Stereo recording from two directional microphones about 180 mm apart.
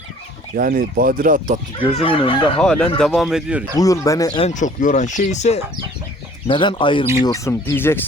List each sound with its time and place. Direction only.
0.5 s speech: 50° right (ahead or behind)
1.9 s speech: 30° left (ahead or behind)
2.6 s speech: 5° left (ahead or behind)
3.8 s speech: 20° left (ahead or behind)
4.4 s speech: 40° left (ahead or behind)
6.5 s speech: 25° left (ahead or behind)